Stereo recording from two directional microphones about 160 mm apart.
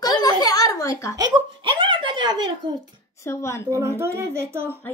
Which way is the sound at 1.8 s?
30° right (ahead or behind).